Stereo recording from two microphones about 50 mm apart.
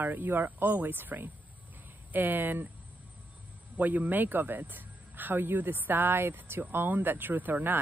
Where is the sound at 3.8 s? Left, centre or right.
Right.